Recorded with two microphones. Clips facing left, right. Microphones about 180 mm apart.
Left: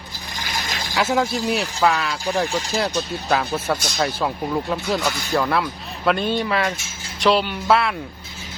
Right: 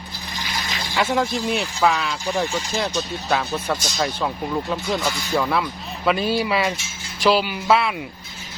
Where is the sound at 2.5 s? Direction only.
35° left (ahead or behind).